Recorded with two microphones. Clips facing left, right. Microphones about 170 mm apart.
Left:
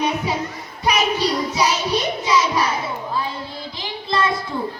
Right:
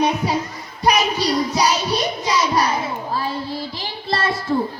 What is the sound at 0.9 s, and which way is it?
Child singing, 35° right (ahead or behind).